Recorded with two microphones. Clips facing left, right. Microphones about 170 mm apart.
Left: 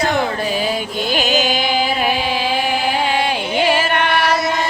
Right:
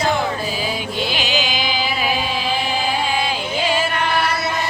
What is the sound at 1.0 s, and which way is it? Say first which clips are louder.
Music: left 7 dB; 45° left (ahead or behind).